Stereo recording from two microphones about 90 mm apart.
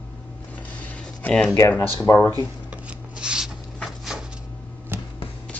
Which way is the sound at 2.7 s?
10° right (ahead or behind).